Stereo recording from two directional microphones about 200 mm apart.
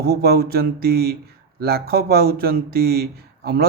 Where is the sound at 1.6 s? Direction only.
50° right (ahead or behind).